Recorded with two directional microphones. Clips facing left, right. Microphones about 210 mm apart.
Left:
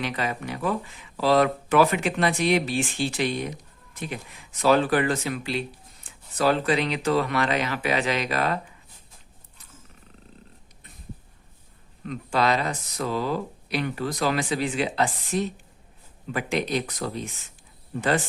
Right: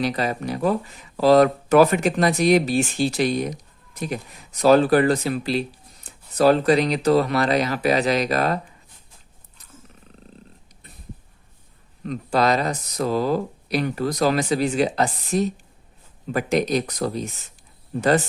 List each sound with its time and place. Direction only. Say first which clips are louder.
0.0 s speech: right 5 dB; 40° right (ahead or behind)
12.0 s speech: right 4 dB; 40° right (ahead or behind)